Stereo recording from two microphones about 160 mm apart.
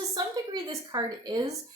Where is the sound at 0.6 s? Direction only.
25° right (ahead or behind).